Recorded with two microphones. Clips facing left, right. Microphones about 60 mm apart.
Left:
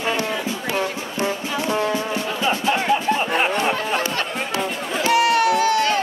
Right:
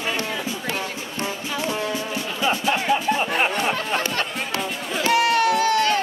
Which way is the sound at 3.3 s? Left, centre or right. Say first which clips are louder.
Left 2 dB; left.